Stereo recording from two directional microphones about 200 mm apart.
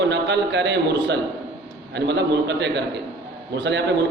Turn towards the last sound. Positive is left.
turn(degrees=-60)  # may be behind; listen again after turning